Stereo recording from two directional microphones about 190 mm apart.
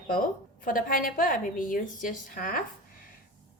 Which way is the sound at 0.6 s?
50° left (ahead or behind).